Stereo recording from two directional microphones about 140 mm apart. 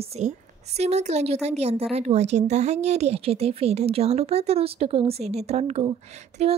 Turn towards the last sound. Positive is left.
turn(degrees=-50)  # may be behind; listen again after turning